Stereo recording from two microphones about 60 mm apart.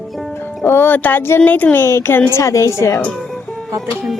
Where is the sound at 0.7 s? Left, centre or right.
Left.